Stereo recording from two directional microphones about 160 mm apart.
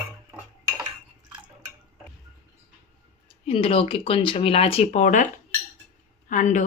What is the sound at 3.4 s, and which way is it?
Speech, 35° left (ahead or behind).